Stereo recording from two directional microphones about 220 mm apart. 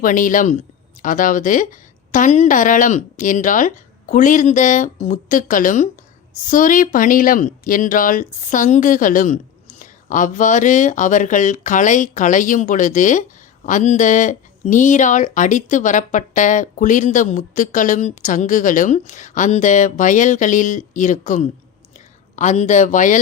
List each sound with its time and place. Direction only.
0.0 s speech: 35° left (ahead or behind)